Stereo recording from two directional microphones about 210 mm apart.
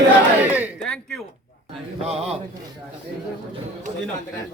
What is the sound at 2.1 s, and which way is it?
Speech, 30° right (ahead or behind).